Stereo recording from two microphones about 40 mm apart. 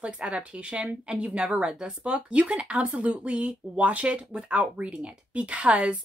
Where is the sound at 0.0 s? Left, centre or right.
Right.